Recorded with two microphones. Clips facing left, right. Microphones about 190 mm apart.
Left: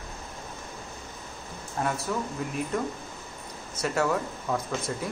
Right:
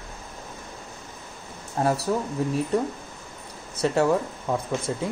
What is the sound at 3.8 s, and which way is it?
Speech, 30° right (ahead or behind).